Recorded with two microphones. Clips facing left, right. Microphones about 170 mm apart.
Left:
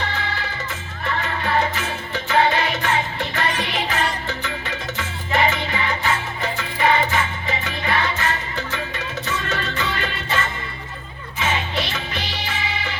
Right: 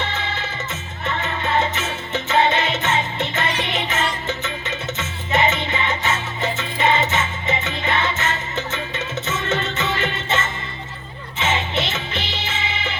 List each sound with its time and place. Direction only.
0.0 s music: 25° right (ahead or behind)